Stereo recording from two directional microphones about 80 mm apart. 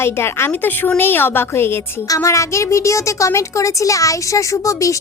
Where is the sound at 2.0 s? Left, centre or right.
Left.